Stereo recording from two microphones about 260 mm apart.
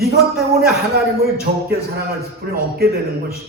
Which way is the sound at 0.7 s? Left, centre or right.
Right.